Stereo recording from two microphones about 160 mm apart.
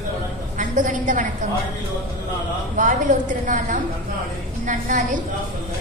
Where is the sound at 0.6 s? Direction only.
50° right (ahead or behind).